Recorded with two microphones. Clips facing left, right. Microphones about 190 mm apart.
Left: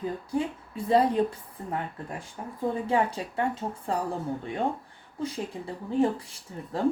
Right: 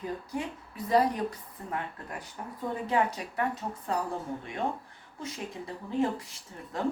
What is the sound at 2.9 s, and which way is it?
Speech, 30° left (ahead or behind).